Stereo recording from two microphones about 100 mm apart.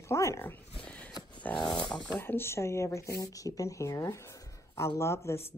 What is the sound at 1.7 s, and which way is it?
Speech, 45° left (ahead or behind).